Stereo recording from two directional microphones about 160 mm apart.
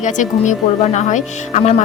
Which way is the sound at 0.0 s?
50° left (ahead or behind).